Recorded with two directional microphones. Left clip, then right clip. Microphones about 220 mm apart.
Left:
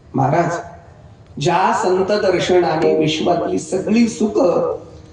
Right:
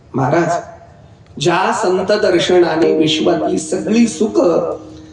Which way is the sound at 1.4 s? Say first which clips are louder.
Right 3 dB; 45° right (ahead or behind).